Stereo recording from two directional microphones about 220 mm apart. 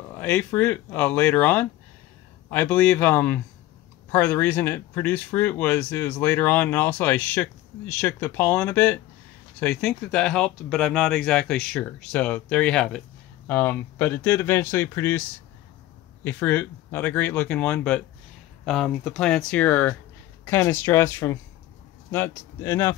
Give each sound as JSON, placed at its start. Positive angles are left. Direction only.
{"t": 0.2, "sound": "speech", "side_deg": 5}
{"t": 16.3, "sound": "speech", "side_deg": 10}